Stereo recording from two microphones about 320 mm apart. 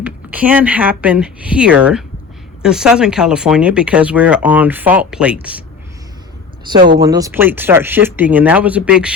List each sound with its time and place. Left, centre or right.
0.0 s speech: centre
6.7 s speech: right
7.0 s speech: centre